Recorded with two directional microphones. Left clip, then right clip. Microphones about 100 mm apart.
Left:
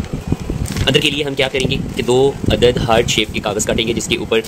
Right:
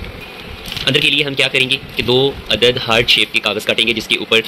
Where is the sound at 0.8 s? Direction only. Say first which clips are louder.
Right 2 dB; 25° left (ahead or behind).